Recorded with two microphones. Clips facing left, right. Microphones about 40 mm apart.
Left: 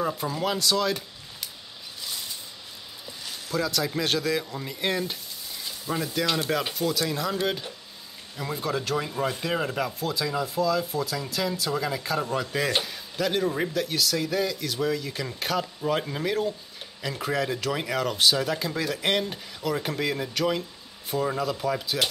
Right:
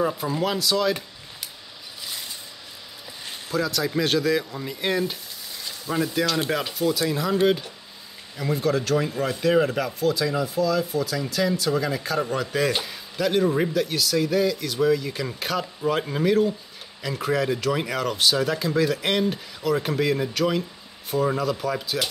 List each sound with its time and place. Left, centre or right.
0.4 s speech: centre
3.5 s speech: centre
5.9 s speech: left
6.7 s speech: centre
8.4 s speech: centre